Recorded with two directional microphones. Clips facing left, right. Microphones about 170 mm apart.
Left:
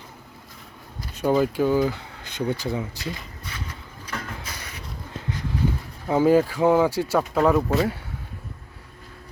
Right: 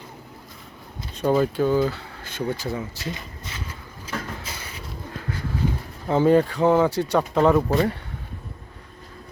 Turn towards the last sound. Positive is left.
turn(degrees=0)  # may be behind; listen again after turning